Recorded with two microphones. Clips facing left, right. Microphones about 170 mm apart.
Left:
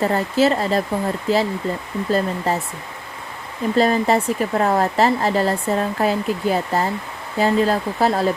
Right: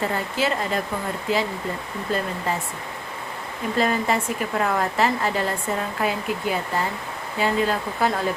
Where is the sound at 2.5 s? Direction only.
40° left (ahead or behind).